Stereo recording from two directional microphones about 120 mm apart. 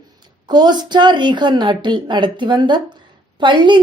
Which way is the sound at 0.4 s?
35° right (ahead or behind).